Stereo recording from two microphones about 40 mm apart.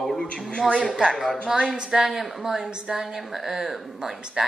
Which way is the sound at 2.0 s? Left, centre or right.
Centre.